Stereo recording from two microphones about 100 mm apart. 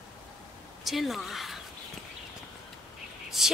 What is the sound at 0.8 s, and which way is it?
Speech, centre (ahead or behind).